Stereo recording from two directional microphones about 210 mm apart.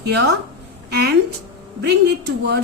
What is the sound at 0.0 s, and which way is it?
A woman's voice, 50° right (ahead or behind).